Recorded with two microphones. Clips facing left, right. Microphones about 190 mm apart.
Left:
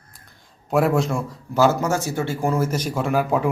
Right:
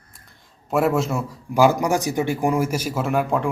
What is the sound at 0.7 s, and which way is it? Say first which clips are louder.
Speech: left 1 dB; centre (ahead or behind).